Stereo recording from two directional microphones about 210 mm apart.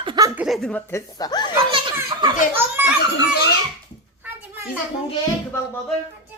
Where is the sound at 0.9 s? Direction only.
15° left (ahead or behind).